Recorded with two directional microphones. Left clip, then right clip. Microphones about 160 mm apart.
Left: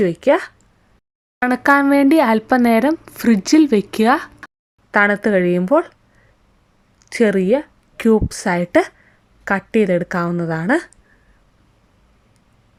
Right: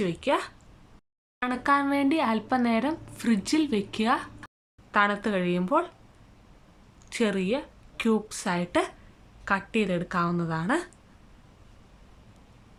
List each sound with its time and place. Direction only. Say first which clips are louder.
0.0 s speech: left 11 dB; 35° left (ahead or behind)
7.1 s a woman's voice: left 12 dB; 35° left (ahead or behind)